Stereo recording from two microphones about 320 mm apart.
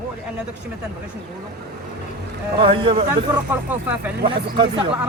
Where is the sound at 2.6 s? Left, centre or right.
Centre.